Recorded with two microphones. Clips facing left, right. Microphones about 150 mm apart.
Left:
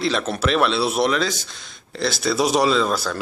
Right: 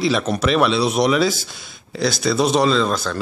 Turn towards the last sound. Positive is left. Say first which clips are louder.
# right 1 dB
turn(degrees=5)  # may be behind; listen again after turning